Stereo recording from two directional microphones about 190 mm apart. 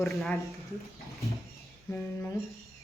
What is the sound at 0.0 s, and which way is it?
Speech, centre (ahead or behind).